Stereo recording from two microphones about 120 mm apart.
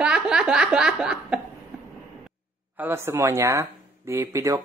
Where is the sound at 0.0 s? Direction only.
5° right (ahead or behind).